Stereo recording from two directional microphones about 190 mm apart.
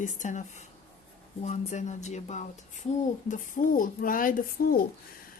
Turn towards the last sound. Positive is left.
turn(degrees=45)  # may be behind; listen again after turning